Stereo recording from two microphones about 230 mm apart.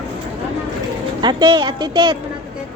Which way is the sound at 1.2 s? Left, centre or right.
Centre.